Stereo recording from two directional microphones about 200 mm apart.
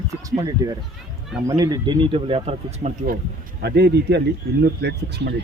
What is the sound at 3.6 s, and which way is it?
Speech, 55° right (ahead or behind).